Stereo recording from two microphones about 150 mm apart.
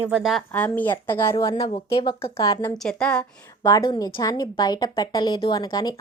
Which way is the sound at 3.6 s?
25° left (ahead or behind).